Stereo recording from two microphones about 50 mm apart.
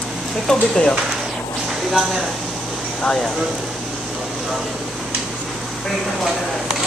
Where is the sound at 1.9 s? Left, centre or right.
Centre.